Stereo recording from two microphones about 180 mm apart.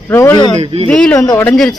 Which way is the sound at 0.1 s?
15° left (ahead or behind).